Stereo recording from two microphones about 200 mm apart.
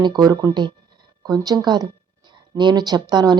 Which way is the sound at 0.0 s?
20° right (ahead or behind).